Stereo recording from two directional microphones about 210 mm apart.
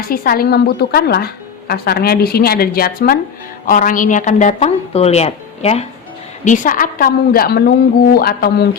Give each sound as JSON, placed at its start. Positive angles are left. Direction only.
{"t": 0.0, "sound": "a woman's voice", "side_deg": 45}